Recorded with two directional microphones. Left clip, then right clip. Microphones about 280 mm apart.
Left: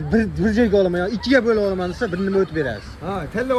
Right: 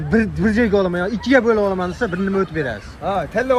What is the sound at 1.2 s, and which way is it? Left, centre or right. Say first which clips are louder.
Speech: right 2 dB; centre.